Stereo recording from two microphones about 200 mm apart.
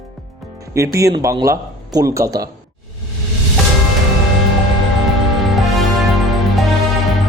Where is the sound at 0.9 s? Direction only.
15° right (ahead or behind).